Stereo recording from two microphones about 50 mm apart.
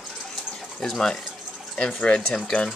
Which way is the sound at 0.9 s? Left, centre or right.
Centre.